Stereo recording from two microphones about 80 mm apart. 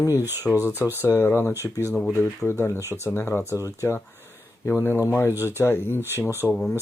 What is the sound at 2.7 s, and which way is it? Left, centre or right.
Speech, right.